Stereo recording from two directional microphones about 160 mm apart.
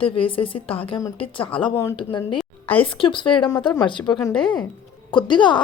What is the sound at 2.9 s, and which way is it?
A woman's voice, 30° left (ahead or behind).